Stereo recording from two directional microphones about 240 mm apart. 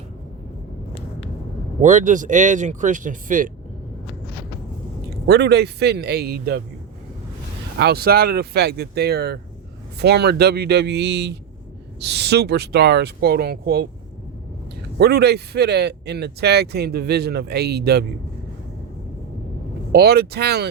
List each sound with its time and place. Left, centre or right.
1.8 s speech: right
5.2 s speech: right
7.8 s speech: right
14.9 s speech: right
19.9 s speech: right